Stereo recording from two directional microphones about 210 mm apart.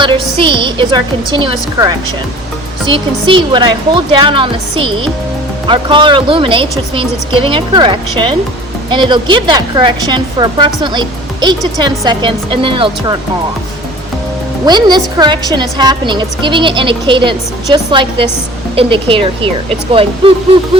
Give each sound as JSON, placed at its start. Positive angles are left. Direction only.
{"t": 0.0, "sound": "a woman's voice", "side_deg": -25}
{"t": 14.6, "sound": "a woman's voice", "side_deg": -20}